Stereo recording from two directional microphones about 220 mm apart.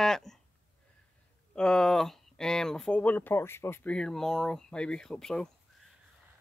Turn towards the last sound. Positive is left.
turn(degrees=5)  # may be behind; listen again after turning